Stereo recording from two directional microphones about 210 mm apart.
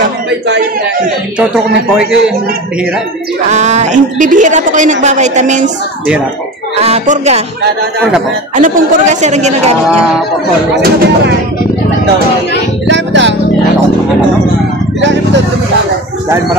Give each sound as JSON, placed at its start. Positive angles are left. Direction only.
{"t": 2.0, "sound": "a man's voice", "side_deg": -5}
{"t": 3.4, "sound": "a woman's voice", "side_deg": -35}
{"t": 6.8, "sound": "a woman's voice", "side_deg": -30}
{"t": 8.5, "sound": "a woman's voice", "side_deg": -35}
{"t": 9.8, "sound": "a man's voice", "side_deg": -5}
{"t": 10.7, "sound": "speech", "side_deg": -50}
{"t": 12.8, "sound": "music", "side_deg": -60}